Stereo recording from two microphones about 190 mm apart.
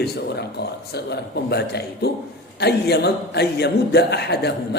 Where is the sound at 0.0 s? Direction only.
60° left (ahead or behind).